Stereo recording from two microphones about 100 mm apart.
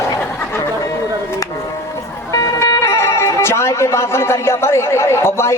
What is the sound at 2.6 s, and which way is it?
Speech, 30° left (ahead or behind).